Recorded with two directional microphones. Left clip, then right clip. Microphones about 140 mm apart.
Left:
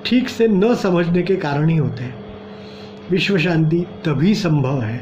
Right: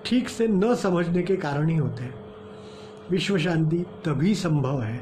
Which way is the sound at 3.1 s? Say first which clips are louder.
Left 7 dB; 15° right (ahead or behind).